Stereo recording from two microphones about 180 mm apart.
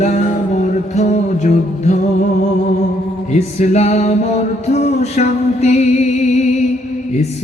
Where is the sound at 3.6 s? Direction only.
40° left (ahead or behind).